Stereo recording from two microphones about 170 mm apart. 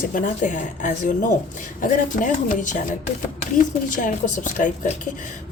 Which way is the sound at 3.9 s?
50° left (ahead or behind).